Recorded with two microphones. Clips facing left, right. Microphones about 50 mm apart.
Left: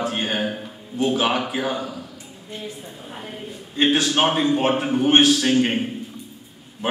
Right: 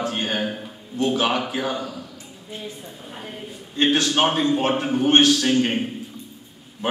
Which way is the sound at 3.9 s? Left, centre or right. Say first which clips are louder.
Even; centre.